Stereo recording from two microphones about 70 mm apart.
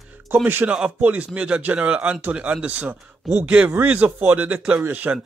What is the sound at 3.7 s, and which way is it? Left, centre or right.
Speech, right.